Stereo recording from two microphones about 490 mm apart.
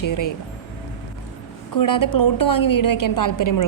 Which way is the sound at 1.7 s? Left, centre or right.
Left.